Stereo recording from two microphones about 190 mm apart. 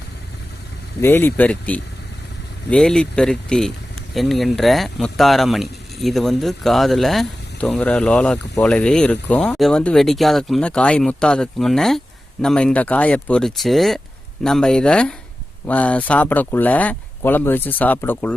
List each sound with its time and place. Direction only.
1.0 s speech: 10° left (ahead or behind)